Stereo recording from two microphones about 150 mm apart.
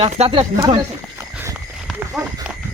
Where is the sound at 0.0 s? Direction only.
45° right (ahead or behind).